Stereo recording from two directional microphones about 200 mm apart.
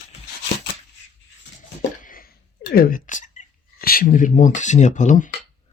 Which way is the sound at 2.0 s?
45° left (ahead or behind).